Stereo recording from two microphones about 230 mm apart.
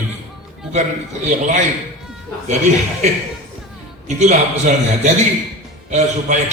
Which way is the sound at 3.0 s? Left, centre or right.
Right.